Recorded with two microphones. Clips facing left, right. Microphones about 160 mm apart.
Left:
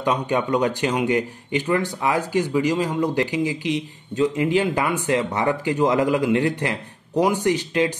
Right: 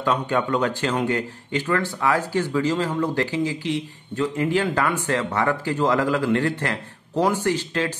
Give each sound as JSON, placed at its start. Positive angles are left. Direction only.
{"t": 0.0, "sound": "speech", "side_deg": 20}